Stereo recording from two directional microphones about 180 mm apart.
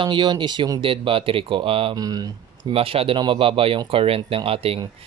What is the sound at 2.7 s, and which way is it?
Speech, 30° right (ahead or behind).